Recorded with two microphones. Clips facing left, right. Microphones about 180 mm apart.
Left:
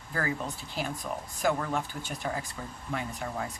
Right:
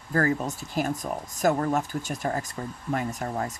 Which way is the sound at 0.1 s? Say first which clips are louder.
Right 7 dB; 45° right (ahead or behind).